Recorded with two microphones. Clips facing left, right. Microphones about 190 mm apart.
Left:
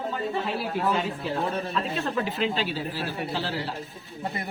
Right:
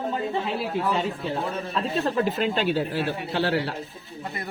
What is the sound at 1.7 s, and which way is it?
Speech, 40° right (ahead or behind).